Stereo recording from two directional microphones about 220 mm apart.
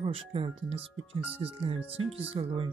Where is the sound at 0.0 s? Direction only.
25° right (ahead or behind).